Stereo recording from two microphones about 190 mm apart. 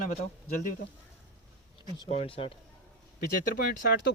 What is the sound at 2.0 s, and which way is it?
Speech, 30° left (ahead or behind).